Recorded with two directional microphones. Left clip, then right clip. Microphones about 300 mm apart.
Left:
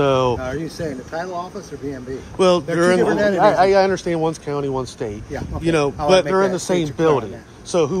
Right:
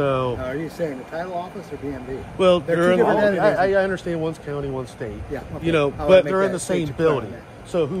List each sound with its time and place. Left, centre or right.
0.0 s speech: centre
2.3 s speech: centre
3.0 s speech: left
3.3 s speech: centre